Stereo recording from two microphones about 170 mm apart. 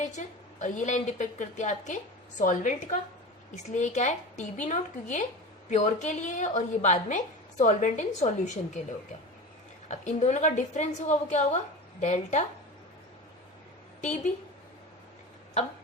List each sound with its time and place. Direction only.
0.0 s a woman's voice: 45° left (ahead or behind)
9.9 s a woman's voice: 45° left (ahead or behind)